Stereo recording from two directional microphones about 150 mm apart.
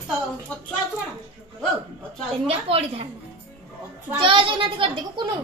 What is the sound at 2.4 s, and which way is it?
Speech, 40° right (ahead or behind).